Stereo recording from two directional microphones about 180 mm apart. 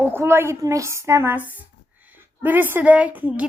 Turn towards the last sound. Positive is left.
turn(degrees=-10)  # may be behind; listen again after turning